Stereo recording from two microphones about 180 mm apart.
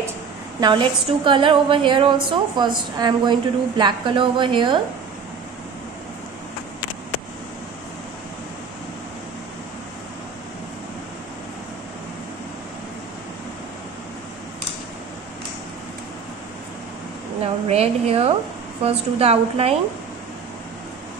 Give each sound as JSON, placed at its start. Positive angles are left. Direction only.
{"t": 0.6, "sound": "a woman's voice", "side_deg": -25}
{"t": 17.6, "sound": "a woman's voice", "side_deg": -35}